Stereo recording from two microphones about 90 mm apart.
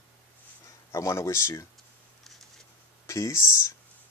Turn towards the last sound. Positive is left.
turn(degrees=30)  # may be behind; listen again after turning